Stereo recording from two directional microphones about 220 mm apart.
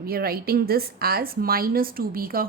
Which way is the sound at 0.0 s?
45° right (ahead or behind).